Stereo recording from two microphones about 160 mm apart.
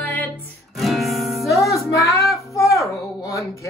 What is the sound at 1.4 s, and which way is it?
Music, 20° left (ahead or behind).